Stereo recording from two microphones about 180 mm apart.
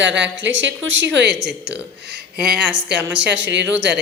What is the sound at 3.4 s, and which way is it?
Speech, 80° right.